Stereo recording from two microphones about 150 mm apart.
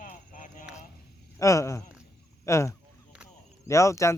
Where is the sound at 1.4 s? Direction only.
20° left (ahead or behind).